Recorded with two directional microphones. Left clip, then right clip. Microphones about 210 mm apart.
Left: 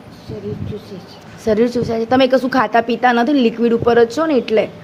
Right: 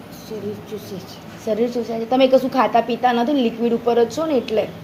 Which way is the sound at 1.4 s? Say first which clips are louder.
Left 5 dB; 60° left (ahead or behind).